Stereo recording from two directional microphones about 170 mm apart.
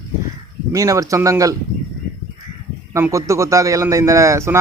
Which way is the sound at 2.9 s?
15° right (ahead or behind).